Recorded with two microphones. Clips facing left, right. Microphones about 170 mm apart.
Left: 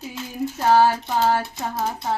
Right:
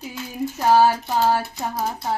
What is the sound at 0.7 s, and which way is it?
Child singing, 15° right (ahead or behind).